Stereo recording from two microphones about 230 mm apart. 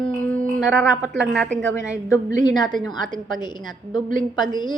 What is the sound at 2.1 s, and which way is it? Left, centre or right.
A woman's voice, centre.